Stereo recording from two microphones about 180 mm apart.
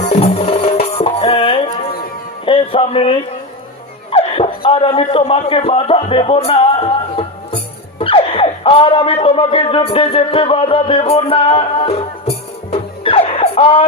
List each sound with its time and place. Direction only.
0.1 s music: 35° left (ahead or behind)
2.4 s a sound: 30° left (ahead or behind)
4.1 s speech: 30° left (ahead or behind)
12.7 s music: 35° left (ahead or behind)